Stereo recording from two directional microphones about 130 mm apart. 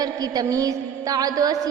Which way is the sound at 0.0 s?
30° right (ahead or behind).